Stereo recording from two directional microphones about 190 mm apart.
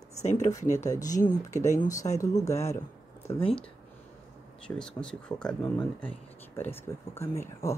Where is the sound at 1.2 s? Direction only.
40° left (ahead or behind).